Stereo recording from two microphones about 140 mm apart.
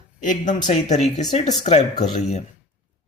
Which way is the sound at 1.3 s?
55° left (ahead or behind).